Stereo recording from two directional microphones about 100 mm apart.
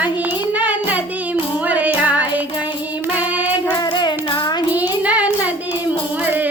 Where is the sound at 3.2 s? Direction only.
15° right (ahead or behind).